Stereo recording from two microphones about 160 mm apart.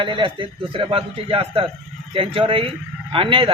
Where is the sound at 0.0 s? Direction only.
30° right (ahead or behind).